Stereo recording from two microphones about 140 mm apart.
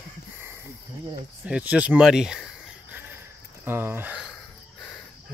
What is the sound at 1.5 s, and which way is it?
Speech, 10° right (ahead or behind).